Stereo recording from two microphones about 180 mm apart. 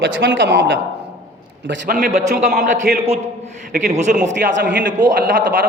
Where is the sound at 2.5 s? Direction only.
60° right (ahead or behind).